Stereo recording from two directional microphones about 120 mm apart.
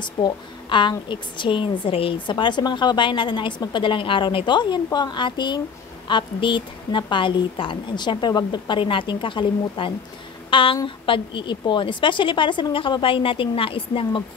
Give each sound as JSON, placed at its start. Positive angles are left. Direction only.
{"t": 0.0, "sound": "a woman's voice", "side_deg": 40}